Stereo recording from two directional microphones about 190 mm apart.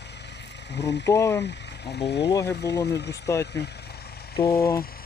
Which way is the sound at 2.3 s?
15° left (ahead or behind).